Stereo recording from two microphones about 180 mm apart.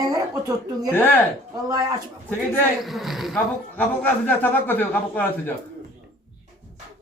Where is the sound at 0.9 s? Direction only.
10° left (ahead or behind).